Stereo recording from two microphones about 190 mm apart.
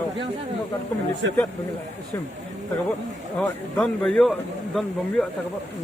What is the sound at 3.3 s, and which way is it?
A man's voice, 5° left (ahead or behind).